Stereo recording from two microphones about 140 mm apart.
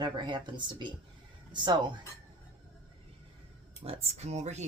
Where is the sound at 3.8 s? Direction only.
45° right (ahead or behind).